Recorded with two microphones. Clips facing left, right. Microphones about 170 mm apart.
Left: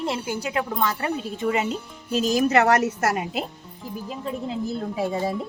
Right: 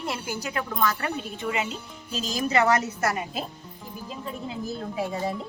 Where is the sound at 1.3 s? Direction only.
40° left (ahead or behind).